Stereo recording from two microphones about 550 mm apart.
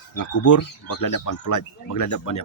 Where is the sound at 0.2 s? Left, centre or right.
Left.